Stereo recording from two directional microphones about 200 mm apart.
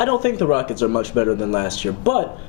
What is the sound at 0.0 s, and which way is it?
A man's voice, 15° left (ahead or behind).